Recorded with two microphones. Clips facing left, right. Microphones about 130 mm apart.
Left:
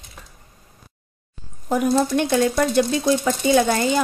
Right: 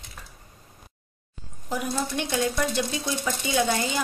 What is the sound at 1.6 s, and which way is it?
Speech, 50° left (ahead or behind).